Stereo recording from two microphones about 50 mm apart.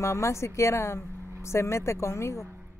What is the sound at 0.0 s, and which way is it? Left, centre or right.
Speech, left.